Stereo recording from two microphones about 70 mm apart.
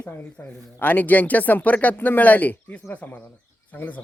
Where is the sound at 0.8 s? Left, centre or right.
Left.